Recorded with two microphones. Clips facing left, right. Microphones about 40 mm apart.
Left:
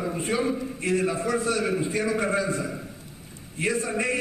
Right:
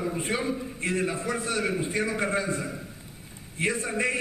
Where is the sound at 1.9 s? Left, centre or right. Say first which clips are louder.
Left 2 dB; centre.